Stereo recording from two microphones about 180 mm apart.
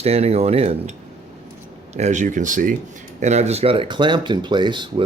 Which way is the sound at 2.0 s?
40° right (ahead or behind).